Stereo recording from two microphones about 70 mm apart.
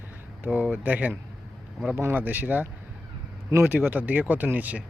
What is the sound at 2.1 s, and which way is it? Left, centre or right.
Speech, right.